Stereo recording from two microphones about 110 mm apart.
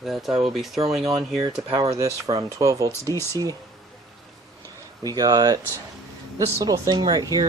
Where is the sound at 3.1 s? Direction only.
25° left (ahead or behind).